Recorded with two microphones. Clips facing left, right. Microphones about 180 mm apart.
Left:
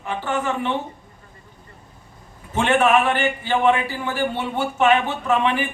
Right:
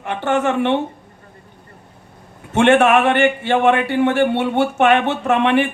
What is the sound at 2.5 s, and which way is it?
A man's voice, 75° right (ahead or behind).